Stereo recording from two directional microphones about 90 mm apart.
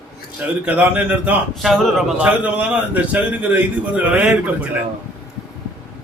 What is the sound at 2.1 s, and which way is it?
A man's voice, 15° right (ahead or behind).